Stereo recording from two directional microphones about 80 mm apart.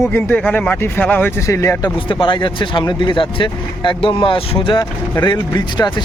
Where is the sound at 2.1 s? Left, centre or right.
Left.